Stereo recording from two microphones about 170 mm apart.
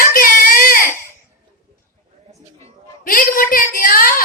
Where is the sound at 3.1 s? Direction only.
55° left (ahead or behind).